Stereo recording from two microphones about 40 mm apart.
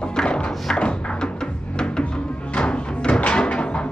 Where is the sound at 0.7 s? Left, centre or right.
Left.